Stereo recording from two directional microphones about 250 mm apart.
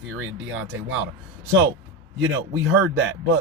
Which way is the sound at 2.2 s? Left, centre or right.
Right.